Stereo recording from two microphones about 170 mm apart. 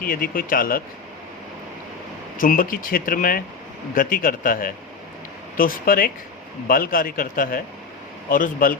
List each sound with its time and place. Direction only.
0.0 s speech: 55° left (ahead or behind)
2.4 s speech: 55° left (ahead or behind)